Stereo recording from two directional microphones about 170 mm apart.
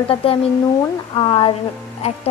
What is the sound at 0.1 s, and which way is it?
A woman's voice, 30° left (ahead or behind).